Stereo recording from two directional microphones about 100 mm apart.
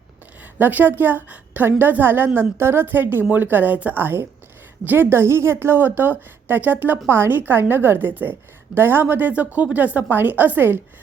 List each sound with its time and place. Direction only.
0.4 s a woman's voice: 15° right (ahead or behind)